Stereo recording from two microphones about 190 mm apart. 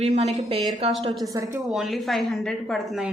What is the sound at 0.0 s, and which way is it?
Speech, 35° right (ahead or behind).